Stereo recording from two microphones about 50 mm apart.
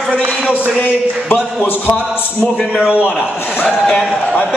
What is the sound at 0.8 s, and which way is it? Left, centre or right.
A man's voice, left.